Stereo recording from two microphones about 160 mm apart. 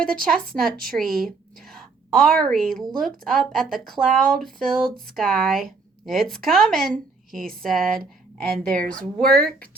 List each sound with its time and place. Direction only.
0.0 s a woman's voice: 65° right (ahead or behind)
0.9 s a woman's voice: centre (ahead or behind)
8.5 s a woman's voice: 55° right (ahead or behind)
9.0 s speech: 5° left (ahead or behind)